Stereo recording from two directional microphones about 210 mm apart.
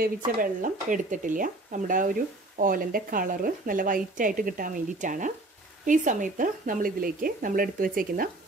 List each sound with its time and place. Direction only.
0.0 s speech: 40° right (ahead or behind)